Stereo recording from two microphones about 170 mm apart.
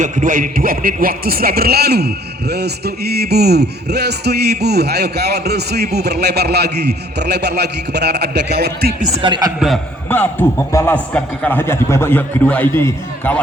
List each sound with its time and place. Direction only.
0.0 s a man's voice: 50° right (ahead or behind); by 9.0 s 70° right (ahead or behind)
9.2 s a man's voice: 25° right (ahead or behind)
9.6 s a man's voice: centre (ahead or behind)
10.1 s a man's voice: 10° left (ahead or behind)